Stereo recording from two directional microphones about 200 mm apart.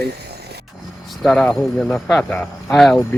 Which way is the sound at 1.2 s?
5° left (ahead or behind).